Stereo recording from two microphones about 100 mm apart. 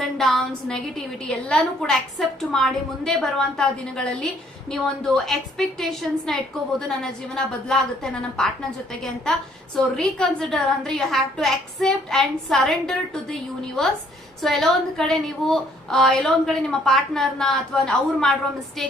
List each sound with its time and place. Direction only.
0.0 s a woman's voice: 5° left (ahead or behind)
9.7 s a woman's voice: 5° left (ahead or behind)